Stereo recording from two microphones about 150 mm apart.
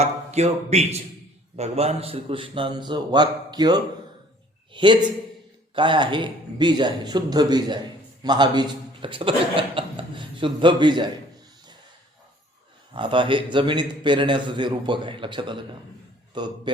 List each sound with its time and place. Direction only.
0.0 s a man's voice: 45° right (ahead or behind); by 11.1 s 30° right (ahead or behind)
12.9 s a man's voice: 35° right (ahead or behind)